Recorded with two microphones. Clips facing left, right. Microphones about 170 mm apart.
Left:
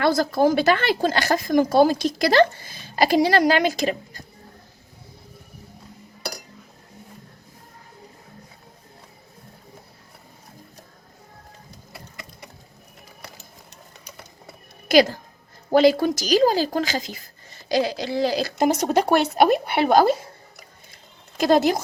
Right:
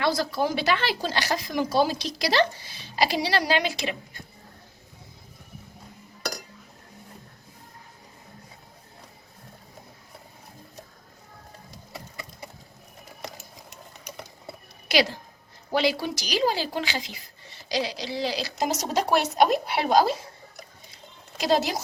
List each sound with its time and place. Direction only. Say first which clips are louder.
0.0 s speech: left 6 dB; 50° left (ahead or behind)
14.8 s a woman's voice: left 7 dB; 45° left (ahead or behind)
20.9 s a sound: left 3 dB; 50° left (ahead or behind)